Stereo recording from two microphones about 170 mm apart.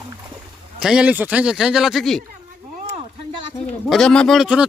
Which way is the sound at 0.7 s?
5° right (ahead or behind).